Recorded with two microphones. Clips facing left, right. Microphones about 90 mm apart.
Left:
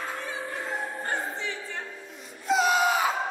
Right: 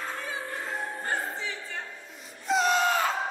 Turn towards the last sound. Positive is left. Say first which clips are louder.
# left 1 dB
turn(degrees=10)  # may be behind; listen again after turning